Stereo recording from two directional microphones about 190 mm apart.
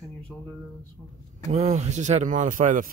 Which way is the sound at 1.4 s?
35° right (ahead or behind).